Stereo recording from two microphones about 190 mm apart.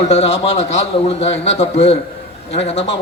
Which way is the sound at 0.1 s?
35° left (ahead or behind).